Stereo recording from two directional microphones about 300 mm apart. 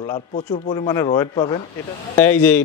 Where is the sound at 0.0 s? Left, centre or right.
Centre.